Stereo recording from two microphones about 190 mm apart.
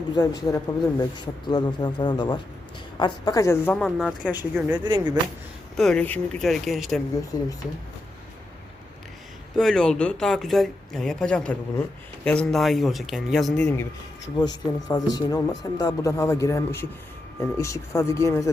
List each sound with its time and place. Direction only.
0.1 s speech: 20° left (ahead or behind)
3.8 s speech: centre (ahead or behind)
4.9 s speech: 25° right (ahead or behind)
5.7 s speech: 5° left (ahead or behind)
7.3 s speech: 20° left (ahead or behind)
9.6 s speech: 5° left (ahead or behind)
14.3 s speech: 20° left (ahead or behind)